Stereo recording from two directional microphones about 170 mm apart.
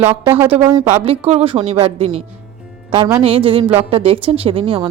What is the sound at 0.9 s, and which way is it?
A woman's voice, 40° right (ahead or behind).